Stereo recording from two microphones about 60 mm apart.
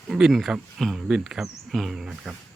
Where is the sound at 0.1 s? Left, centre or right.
Centre.